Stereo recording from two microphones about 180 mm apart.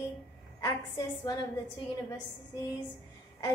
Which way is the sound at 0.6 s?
20° left (ahead or behind).